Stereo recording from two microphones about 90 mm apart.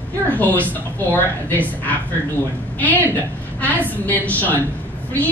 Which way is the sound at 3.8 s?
20° left (ahead or behind).